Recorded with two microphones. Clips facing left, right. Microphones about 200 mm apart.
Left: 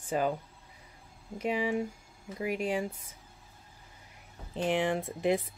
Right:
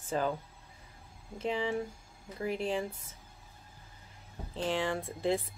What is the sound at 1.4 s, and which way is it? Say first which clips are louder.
Speech: left 2 dB; 10° left (ahead or behind).